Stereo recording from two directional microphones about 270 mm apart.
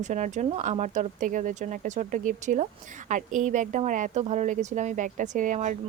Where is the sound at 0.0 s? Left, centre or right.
Right.